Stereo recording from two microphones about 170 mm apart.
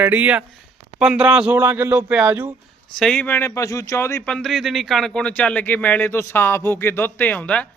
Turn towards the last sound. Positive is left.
turn(degrees=5)  # may be behind; listen again after turning